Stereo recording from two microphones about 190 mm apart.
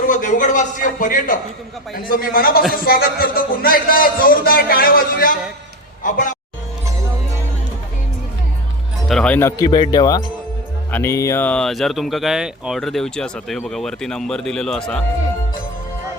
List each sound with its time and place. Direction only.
0.1 s a man's voice: 40° left (ahead or behind)
9.0 s speech: 5° left (ahead or behind)